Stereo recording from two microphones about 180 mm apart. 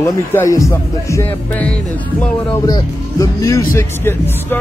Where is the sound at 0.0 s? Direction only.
15° left (ahead or behind).